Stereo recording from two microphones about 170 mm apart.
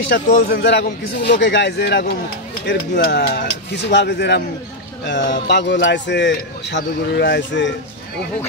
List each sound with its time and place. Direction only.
0.1 s a man's voice: 70° left (ahead or behind)
1.4 s a man's voice: 90° left
3.0 s a man's voice: 65° left (ahead or behind); by 7.7 s 90° left